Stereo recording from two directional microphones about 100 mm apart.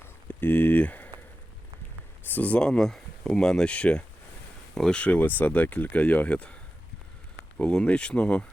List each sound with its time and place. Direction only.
0.0 s a sound: 20° left (ahead or behind)
2.3 s speech: 15° left (ahead or behind)
7.6 s speech: 10° left (ahead or behind)